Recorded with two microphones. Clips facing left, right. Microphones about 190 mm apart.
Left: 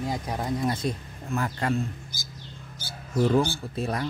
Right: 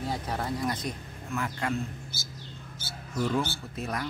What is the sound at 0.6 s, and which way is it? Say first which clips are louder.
Speech: left 4 dB; 25° left (ahead or behind).